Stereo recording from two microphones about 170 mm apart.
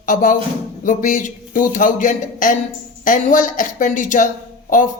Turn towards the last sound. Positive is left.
turn(degrees=50)  # may be behind; listen again after turning